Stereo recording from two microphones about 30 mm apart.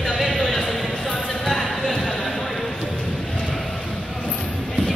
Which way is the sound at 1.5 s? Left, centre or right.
Centre.